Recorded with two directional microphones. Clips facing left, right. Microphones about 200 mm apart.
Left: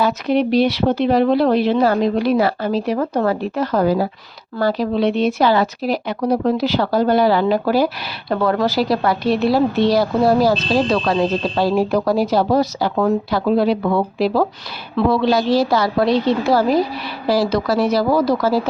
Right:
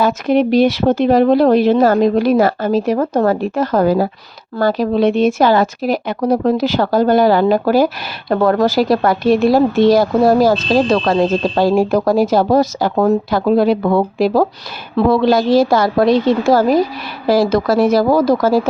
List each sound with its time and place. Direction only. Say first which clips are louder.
0.0 s a woman's voice: right 3 dB; 50° right (ahead or behind)